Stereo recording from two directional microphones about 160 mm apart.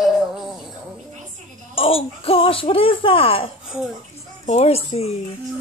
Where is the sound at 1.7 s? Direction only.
35° left (ahead or behind).